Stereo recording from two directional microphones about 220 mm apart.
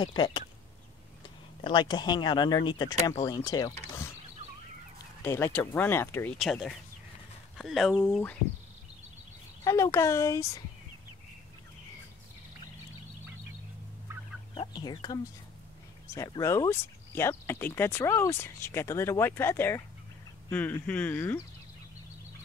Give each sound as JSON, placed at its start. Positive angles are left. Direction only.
{"t": 0.0, "sound": "speech", "side_deg": 20}
{"t": 5.2, "sound": "speech", "side_deg": 10}
{"t": 6.3, "sound": "speech", "side_deg": 0}
{"t": 9.7, "sound": "speech", "side_deg": 15}
{"t": 14.5, "sound": "speech", "side_deg": 20}